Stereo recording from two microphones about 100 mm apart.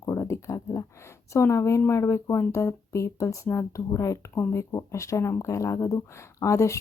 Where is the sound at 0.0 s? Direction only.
35° left (ahead or behind).